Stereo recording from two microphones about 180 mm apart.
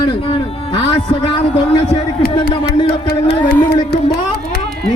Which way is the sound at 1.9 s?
30° left (ahead or behind).